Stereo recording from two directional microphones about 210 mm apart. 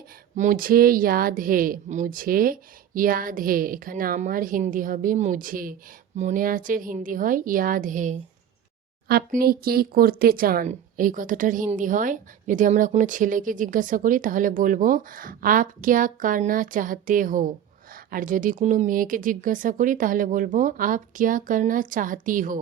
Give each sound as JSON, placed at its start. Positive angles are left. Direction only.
{"t": 0.3, "sound": "speech", "side_deg": -40}